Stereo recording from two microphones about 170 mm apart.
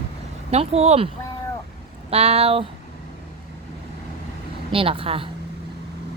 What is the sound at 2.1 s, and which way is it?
Speech, 35° right (ahead or behind).